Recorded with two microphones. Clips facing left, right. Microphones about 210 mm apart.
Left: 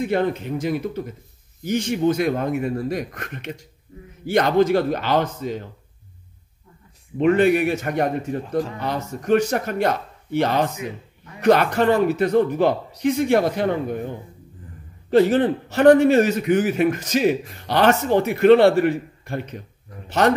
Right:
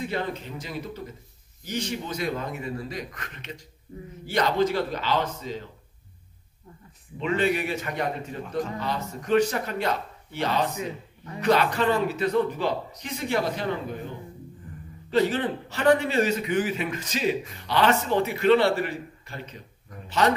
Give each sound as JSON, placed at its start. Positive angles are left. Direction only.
{"t": 0.0, "sound": "a man's voice", "side_deg": 55}
{"t": 7.2, "sound": "a man's voice", "side_deg": 55}